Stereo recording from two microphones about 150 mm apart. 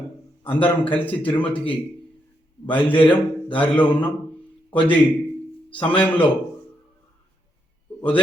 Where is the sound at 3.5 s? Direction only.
10° left (ahead or behind).